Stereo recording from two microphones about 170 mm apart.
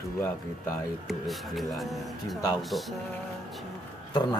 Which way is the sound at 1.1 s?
Centre (ahead or behind).